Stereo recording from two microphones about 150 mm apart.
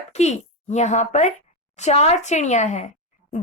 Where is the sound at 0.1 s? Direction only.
50° left (ahead or behind).